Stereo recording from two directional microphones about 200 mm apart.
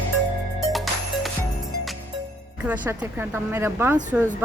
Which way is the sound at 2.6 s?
5° right (ahead or behind).